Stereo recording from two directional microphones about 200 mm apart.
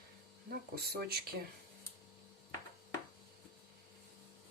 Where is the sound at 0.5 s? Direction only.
50° right (ahead or behind).